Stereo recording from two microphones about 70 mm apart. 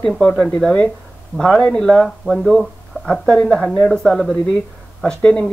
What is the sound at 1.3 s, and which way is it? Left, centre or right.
Speech, centre.